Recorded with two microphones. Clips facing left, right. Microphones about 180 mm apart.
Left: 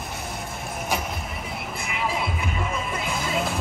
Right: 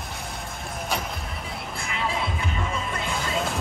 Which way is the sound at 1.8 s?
5° left (ahead or behind).